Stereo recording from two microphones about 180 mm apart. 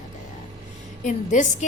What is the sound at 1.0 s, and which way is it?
Speech, 40° left (ahead or behind).